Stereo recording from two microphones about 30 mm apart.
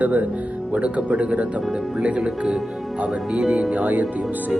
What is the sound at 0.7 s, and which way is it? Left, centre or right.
Speech, right.